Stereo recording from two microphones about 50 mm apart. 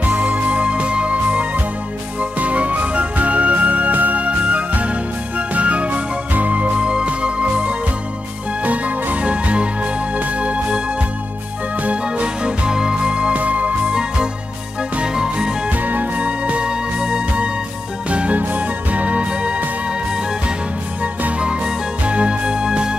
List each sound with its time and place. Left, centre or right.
0.0 s music: right
11.8 s music: right
13.8 s music: centre
15.7 s music: right
21.0 s music: right